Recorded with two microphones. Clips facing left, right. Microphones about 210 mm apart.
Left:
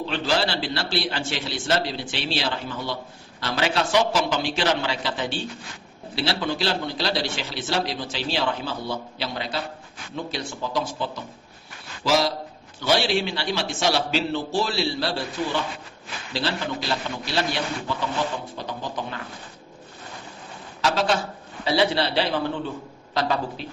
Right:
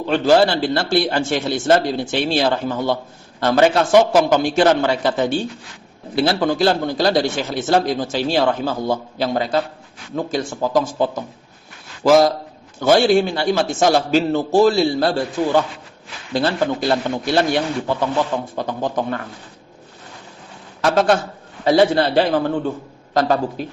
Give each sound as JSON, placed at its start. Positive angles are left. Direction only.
{"t": 0.0, "sound": "a man's voice", "side_deg": -50}
{"t": 20.8, "sound": "a man's voice", "side_deg": -55}